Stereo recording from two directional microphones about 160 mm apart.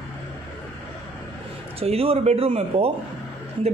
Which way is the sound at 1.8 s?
35° right (ahead or behind).